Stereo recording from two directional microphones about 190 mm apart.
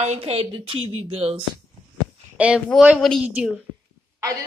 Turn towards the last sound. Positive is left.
turn(degrees=-15)  # may be behind; listen again after turning